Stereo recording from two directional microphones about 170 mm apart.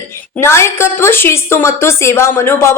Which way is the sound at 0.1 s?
15° left (ahead or behind).